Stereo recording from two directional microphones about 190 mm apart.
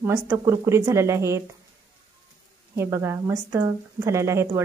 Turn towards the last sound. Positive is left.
turn(degrees=-15)  # may be behind; listen again after turning